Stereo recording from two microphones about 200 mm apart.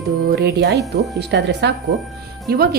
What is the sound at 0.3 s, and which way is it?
A woman's voice, 55° right (ahead or behind).